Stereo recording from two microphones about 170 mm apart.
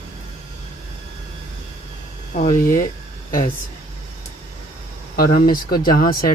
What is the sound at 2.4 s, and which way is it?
Speech, 50° left (ahead or behind).